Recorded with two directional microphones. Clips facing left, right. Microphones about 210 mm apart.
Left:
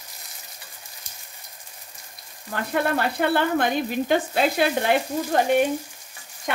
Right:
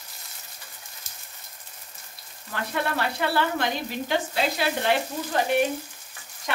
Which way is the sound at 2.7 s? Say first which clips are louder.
Left 5 dB; 50° left (ahead or behind).